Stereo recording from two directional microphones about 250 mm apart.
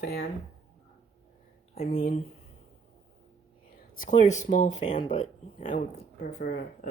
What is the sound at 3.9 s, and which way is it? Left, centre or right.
Speech, left.